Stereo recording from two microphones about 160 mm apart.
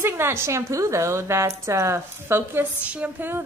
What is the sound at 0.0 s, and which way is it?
A woman's voice, 15° right (ahead or behind).